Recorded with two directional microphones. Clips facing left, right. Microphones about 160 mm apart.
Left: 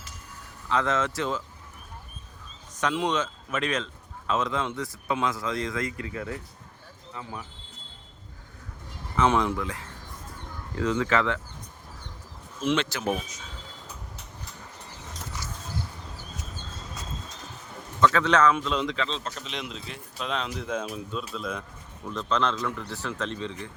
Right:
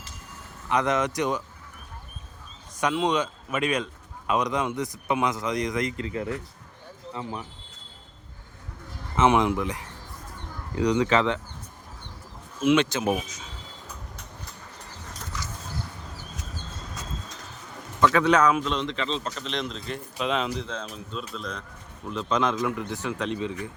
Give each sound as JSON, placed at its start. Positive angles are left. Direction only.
{"t": 0.7, "sound": "speech", "side_deg": -15}
{"t": 3.1, "sound": "a man's voice", "side_deg": -10}
{"t": 9.1, "sound": "a man's voice", "side_deg": -20}
{"t": 12.7, "sound": "a man's voice", "side_deg": -20}
{"t": 18.0, "sound": "speech", "side_deg": -15}
{"t": 18.7, "sound": "speech", "side_deg": 5}
{"t": 20.1, "sound": "speech", "side_deg": -5}
{"t": 20.7, "sound": "speech", "side_deg": 10}
{"t": 22.0, "sound": "speech", "side_deg": -10}